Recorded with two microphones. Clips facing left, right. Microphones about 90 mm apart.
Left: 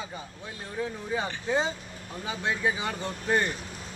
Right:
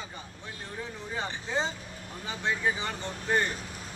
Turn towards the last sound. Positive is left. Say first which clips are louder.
# left 2 dB
turn(degrees=10)  # may be behind; listen again after turning